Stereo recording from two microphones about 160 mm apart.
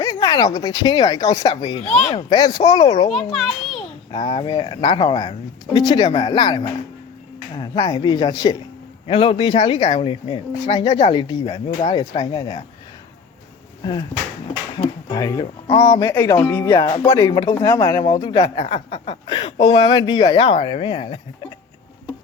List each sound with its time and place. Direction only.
0.0 s speech: 25° left (ahead or behind)
3.3 s a child's voice: centre (ahead or behind)
3.8 s speech: 30° left (ahead or behind)
15.1 s speech: 25° left (ahead or behind)
15.6 s speech: 40° left (ahead or behind)
16.0 s speech: 20° left (ahead or behind)
16.5 s speech: 15° left (ahead or behind)
16.7 s speech: 25° left (ahead or behind)